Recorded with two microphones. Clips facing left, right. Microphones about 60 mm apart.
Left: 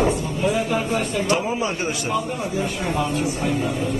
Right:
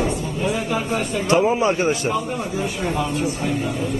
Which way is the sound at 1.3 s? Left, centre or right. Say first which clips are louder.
Right 8 dB; right.